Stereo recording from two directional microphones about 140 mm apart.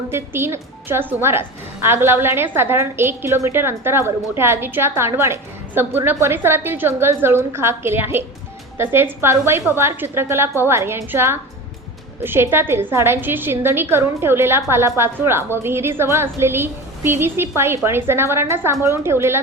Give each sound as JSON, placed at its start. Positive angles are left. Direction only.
{"t": 0.1, "sound": "a woman's voice", "side_deg": -15}